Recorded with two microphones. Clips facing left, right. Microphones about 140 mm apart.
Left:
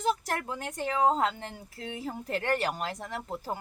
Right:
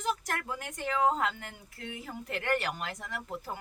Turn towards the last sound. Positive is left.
turn(degrees=30)  # may be behind; listen again after turning